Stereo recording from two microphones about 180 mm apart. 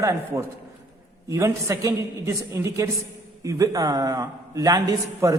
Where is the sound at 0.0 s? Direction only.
15° right (ahead or behind).